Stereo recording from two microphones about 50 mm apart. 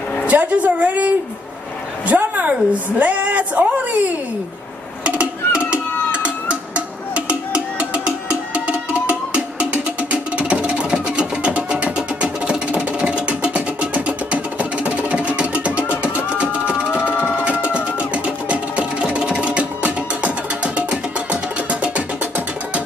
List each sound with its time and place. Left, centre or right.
0.3 s a woman's voice: right
5.0 s music: right
7.2 s music: right
16.9 s music: left
17.5 s music: right